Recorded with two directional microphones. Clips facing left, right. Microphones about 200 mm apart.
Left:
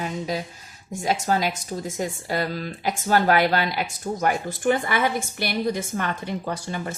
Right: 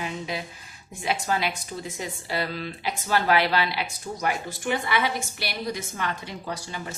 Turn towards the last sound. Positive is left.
turn(degrees=50)  # may be behind; listen again after turning